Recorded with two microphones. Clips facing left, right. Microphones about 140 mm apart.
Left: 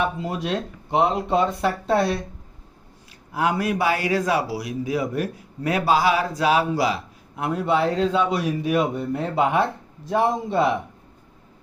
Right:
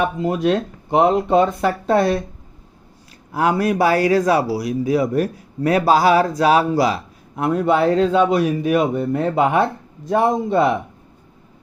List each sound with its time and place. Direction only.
0.2 s speech: 50° right (ahead or behind)
3.3 s a man's voice: 40° right (ahead or behind)